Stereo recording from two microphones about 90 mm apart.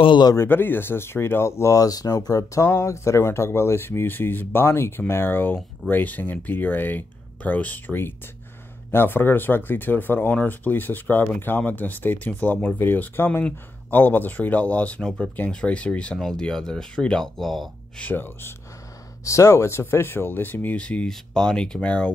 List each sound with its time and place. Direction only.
0.4 s speech: 25° left (ahead or behind); by 17.6 s centre (ahead or behind)
17.9 s speech: 20° left (ahead or behind)
19.2 s speech: 35° left (ahead or behind); by 22.1 s 15° left (ahead or behind)